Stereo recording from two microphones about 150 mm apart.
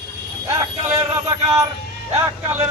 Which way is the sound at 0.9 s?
20° right (ahead or behind).